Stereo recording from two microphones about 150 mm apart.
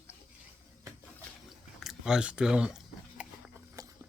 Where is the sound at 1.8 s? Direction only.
5° right (ahead or behind).